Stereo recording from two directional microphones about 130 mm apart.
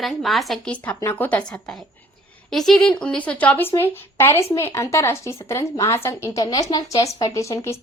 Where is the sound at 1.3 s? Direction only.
10° left (ahead or behind).